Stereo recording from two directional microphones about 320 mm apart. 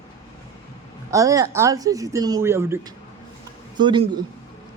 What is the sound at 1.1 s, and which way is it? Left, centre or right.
A man's voice, centre.